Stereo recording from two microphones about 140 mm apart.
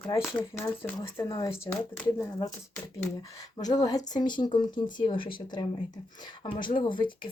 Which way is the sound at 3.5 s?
30° left (ahead or behind).